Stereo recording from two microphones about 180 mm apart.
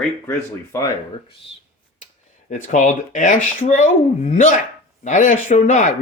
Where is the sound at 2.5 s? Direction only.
45° left (ahead or behind).